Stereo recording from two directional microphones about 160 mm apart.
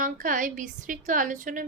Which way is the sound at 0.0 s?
55° right (ahead or behind).